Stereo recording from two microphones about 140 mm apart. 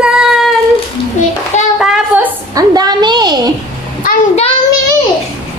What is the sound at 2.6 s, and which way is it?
Speech, 30° right (ahead or behind).